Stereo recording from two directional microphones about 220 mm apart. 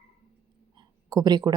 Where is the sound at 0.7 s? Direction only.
20° right (ahead or behind).